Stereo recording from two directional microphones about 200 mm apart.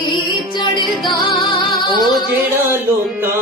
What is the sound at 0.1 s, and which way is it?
Music, 20° left (ahead or behind).